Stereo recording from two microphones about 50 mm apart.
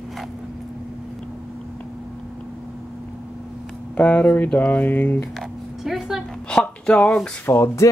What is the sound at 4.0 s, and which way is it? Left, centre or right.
Speech, left.